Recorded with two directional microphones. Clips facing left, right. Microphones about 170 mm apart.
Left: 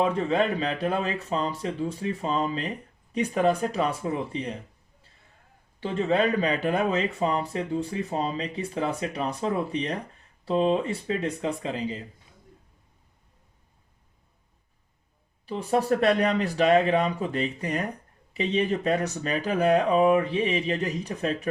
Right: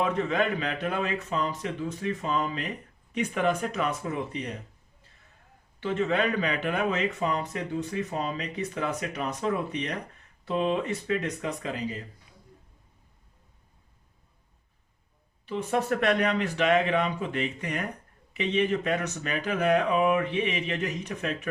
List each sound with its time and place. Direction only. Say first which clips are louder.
0.0 s a man's voice: left 3 dB; 30° left (ahead or behind)
5.8 s a man's voice: left 2 dB; 35° left (ahead or behind)
15.4 s a man's voice: left 3 dB; 35° left (ahead or behind)